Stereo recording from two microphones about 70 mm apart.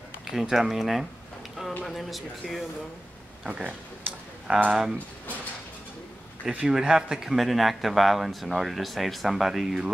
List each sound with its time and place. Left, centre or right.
0.3 s speech: centre
3.4 s speech: centre
6.4 s speech: centre